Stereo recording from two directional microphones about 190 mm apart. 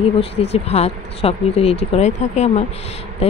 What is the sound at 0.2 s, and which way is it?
Speech, 35° left (ahead or behind).